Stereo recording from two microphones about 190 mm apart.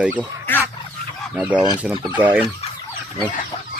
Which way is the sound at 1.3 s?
5° right (ahead or behind).